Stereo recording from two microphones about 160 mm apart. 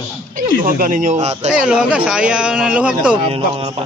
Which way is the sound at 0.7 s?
55° right (ahead or behind).